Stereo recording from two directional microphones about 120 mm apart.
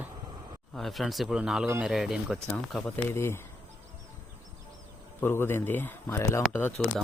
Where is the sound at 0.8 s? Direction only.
Centre (ahead or behind).